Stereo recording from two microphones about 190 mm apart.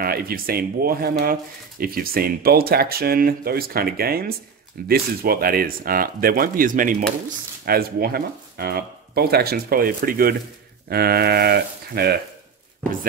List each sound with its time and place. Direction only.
0.0 s speech: 50° right (ahead or behind)